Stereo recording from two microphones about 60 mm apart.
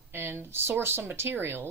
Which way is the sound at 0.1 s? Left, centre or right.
Right.